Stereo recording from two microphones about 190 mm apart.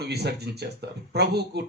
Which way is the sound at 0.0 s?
60° right (ahead or behind).